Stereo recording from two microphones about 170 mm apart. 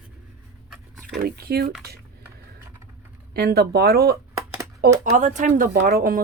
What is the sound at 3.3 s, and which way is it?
Speech, 70° right (ahead or behind).